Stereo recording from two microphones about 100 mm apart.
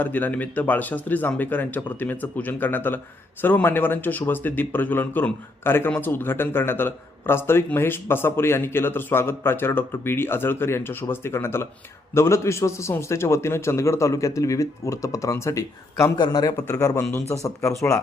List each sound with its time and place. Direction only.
0.0 s speech: 20° left (ahead or behind)
16.1 s a man's voice: 45° left (ahead or behind)
16.6 s speech: 30° left (ahead or behind)